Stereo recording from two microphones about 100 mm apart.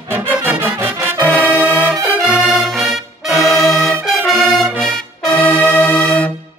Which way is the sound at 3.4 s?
Centre (ahead or behind).